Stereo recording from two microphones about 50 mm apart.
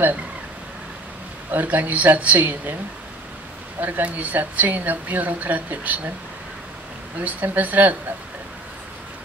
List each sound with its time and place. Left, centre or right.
1.5 s a woman's voice: right
3.8 s a woman's voice: right
7.2 s a woman's voice: right